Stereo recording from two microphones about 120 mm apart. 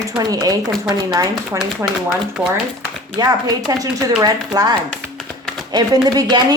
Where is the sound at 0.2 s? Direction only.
30° right (ahead or behind).